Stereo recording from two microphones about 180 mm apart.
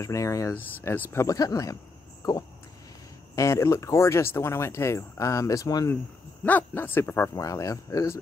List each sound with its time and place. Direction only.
0.0 s speech: 15° left (ahead or behind)
3.3 s speech: 15° left (ahead or behind)